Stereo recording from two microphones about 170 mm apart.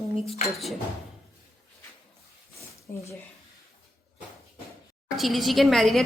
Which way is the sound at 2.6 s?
15° left (ahead or behind).